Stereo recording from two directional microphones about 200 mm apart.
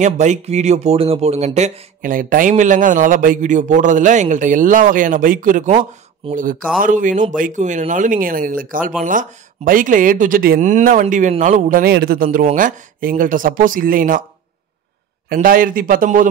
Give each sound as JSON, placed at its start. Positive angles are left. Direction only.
{"t": 0.0, "sound": "speech", "side_deg": -35}
{"t": 6.2, "sound": "speech", "side_deg": -25}
{"t": 6.8, "sound": "speech", "side_deg": -40}
{"t": 15.2, "sound": "speech", "side_deg": -50}